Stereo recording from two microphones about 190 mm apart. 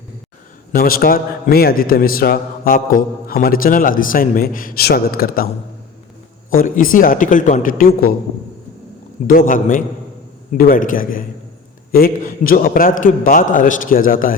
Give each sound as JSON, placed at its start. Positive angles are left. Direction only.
{"t": 0.7, "sound": "a man's voice", "side_deg": 50}
{"t": 6.5, "sound": "a man's voice", "side_deg": 45}
{"t": 9.2, "sound": "a man's voice", "side_deg": 45}